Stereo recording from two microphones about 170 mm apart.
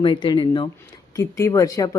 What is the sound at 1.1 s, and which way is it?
Speech, 15° left (ahead or behind).